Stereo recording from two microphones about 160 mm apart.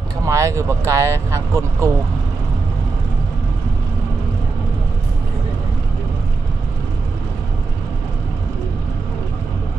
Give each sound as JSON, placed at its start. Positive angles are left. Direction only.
{"t": 0.2, "sound": "speech", "side_deg": -20}